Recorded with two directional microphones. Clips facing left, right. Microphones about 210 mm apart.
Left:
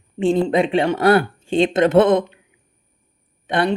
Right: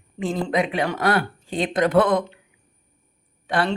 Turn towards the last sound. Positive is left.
turn(degrees=20)  # may be behind; listen again after turning